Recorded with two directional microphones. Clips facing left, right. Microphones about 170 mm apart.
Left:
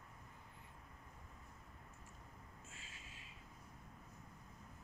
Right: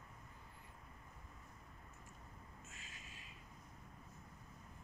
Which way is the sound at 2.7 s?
25° left (ahead or behind).